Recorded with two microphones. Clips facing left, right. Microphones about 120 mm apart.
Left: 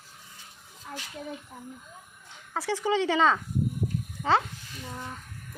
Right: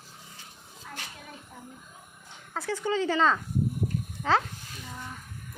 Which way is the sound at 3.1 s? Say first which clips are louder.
Left 1 dB; 5° left (ahead or behind).